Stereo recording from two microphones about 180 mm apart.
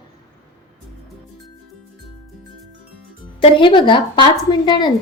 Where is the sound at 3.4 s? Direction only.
25° left (ahead or behind).